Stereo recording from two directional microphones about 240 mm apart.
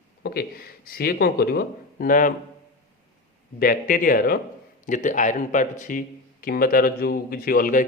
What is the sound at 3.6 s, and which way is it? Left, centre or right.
A man's voice, left.